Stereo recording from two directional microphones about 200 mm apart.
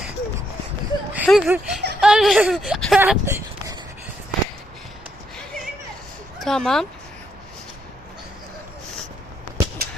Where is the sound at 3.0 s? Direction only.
10° right (ahead or behind).